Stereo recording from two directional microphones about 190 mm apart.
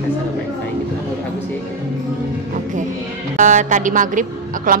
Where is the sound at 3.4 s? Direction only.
40° right (ahead or behind).